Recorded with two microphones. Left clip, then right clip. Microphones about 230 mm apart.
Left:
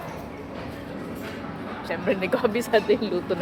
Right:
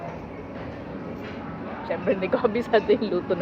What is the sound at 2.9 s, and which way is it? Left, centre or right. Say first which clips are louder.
Speech: right 1 dB; centre.